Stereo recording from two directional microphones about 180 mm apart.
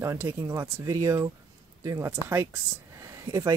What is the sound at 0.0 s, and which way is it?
Speech, 15° right (ahead or behind).